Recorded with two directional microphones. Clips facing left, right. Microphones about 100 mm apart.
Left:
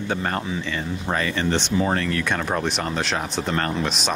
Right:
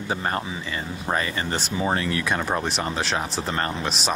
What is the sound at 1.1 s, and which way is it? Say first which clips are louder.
Speech: left 1 dB; 20° right (ahead or behind).